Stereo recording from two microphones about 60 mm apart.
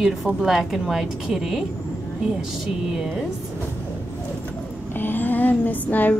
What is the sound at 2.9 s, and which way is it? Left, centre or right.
Speech, centre.